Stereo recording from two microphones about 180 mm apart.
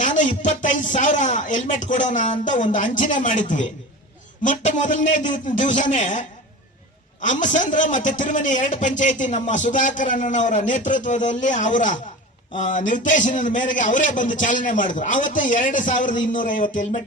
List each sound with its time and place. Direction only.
0.0 s a man's voice: 45° left (ahead or behind)